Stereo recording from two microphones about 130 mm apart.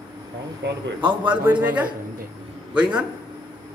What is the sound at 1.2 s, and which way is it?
Speech, 10° right (ahead or behind).